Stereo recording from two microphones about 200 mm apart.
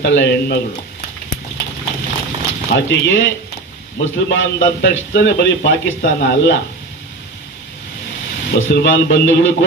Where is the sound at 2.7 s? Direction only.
65° left (ahead or behind).